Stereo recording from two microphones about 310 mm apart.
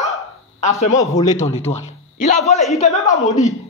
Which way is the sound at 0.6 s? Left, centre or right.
Left.